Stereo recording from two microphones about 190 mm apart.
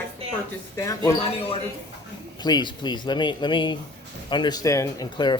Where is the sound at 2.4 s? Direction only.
25° left (ahead or behind).